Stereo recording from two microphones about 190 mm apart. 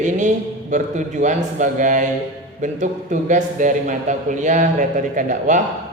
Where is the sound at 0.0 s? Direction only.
40° right (ahead or behind).